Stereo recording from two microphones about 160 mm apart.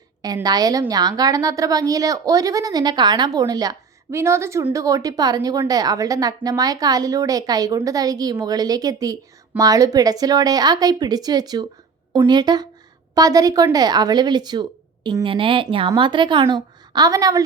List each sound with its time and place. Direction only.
0.4 s a woman's voice: 25° right (ahead or behind)